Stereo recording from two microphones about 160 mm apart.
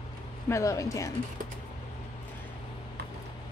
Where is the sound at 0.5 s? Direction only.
20° left (ahead or behind).